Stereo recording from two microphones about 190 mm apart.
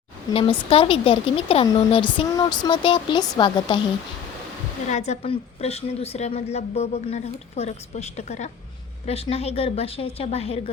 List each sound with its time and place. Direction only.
0.7 s speech: 30° left (ahead or behind)
4.9 s a woman's voice: 35° left (ahead or behind)